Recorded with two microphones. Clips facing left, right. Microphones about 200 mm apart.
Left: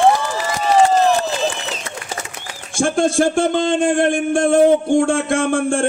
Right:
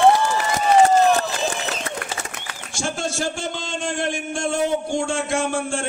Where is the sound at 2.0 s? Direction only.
55° right (ahead or behind).